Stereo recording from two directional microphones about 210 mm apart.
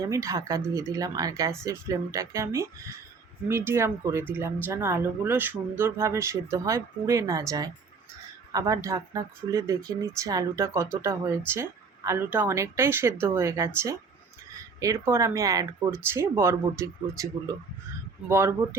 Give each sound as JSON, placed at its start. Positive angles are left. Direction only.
{"t": 0.0, "sound": "speech", "side_deg": -15}
{"t": 18.3, "sound": "speech", "side_deg": -10}